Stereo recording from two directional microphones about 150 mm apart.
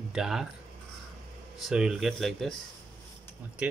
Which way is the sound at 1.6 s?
5° right (ahead or behind).